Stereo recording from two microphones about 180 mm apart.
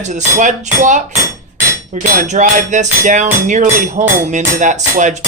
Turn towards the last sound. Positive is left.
turn(degrees=-40)  # may be behind; listen again after turning